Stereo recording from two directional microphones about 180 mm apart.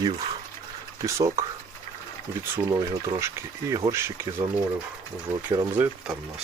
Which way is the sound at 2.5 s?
15° right (ahead or behind).